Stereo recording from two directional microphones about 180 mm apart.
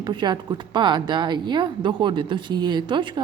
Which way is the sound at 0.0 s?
25° right (ahead or behind).